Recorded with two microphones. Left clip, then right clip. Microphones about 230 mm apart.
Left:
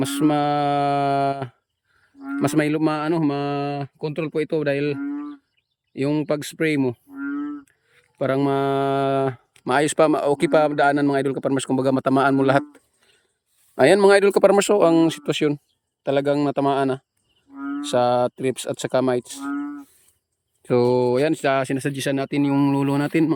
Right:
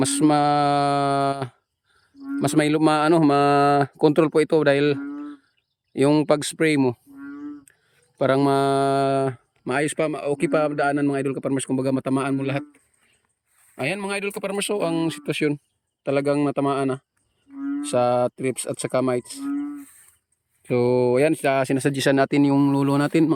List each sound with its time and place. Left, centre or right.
0.0 s speech: centre
4.9 s speech: left
5.9 s speech: centre
7.2 s a sound: left
8.2 s speech: centre
20.6 s speech: centre